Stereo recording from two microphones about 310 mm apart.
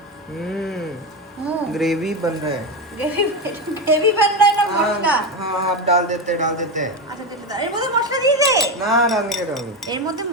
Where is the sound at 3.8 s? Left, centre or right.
Centre.